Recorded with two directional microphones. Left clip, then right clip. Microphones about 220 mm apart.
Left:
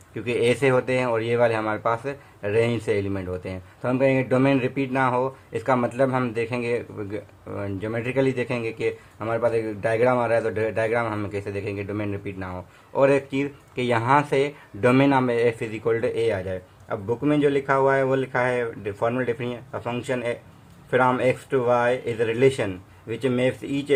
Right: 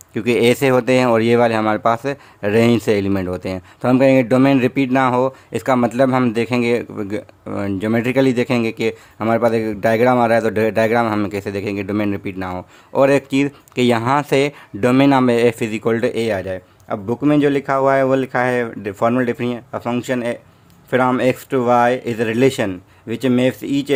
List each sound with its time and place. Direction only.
0.1 s speech: 50° right (ahead or behind)